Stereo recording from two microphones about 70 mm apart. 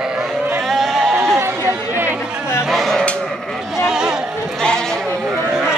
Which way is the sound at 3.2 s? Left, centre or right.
Centre.